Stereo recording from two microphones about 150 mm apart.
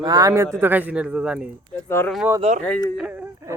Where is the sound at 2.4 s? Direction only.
45° right (ahead or behind).